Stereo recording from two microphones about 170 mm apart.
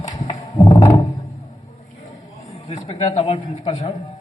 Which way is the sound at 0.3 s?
30° left (ahead or behind).